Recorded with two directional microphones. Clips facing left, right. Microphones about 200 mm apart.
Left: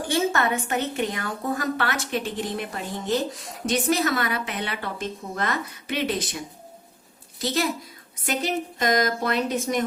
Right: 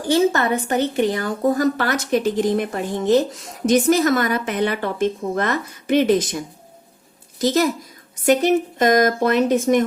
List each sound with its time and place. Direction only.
0.1 s a woman's voice: 35° right (ahead or behind)